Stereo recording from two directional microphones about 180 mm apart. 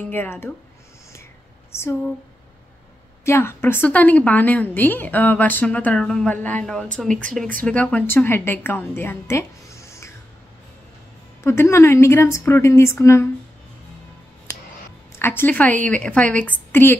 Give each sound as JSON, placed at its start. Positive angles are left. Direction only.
{"t": 0.0, "sound": "a woman's voice", "side_deg": 10}
{"t": 1.7, "sound": "speech", "side_deg": 15}
{"t": 3.3, "sound": "a woman's voice", "side_deg": 15}
{"t": 11.4, "sound": "a woman's voice", "side_deg": 15}
{"t": 15.1, "sound": "a woman's voice", "side_deg": 10}